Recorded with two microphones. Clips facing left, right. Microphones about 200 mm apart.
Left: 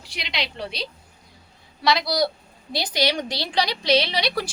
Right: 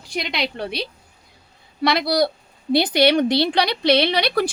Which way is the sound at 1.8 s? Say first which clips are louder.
Right 3 dB; 55° right (ahead or behind).